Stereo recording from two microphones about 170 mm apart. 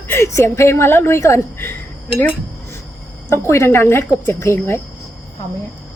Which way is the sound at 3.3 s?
15° left (ahead or behind).